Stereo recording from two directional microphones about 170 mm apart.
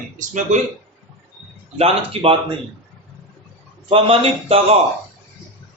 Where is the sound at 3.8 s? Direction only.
35° right (ahead or behind).